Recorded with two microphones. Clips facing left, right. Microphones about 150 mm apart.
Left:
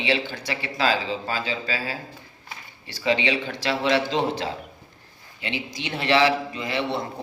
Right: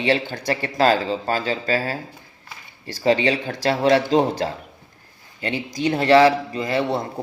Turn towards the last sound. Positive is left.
turn(degrees=-40)  # may be behind; listen again after turning